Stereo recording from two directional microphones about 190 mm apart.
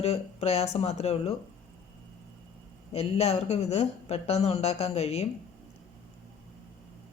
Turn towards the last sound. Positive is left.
turn(degrees=35)  # may be behind; listen again after turning